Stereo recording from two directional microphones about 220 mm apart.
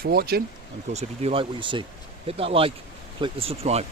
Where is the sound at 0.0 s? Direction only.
45° right (ahead or behind).